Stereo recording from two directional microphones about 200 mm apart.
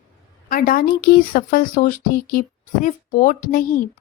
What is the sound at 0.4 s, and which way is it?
Speech, 45° left (ahead or behind).